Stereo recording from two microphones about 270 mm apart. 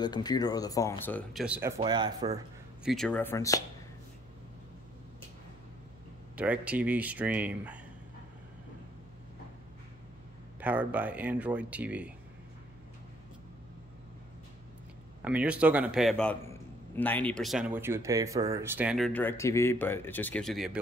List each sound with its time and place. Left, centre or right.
0.0 s speech: centre
2.8 s speech: centre
6.3 s speech: centre
10.6 s speech: centre
15.2 s speech: centre